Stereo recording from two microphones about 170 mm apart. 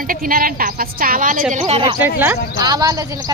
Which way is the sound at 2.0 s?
15° right (ahead or behind).